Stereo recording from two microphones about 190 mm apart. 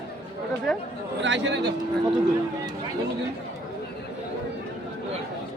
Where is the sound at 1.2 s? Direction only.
70° right (ahead or behind).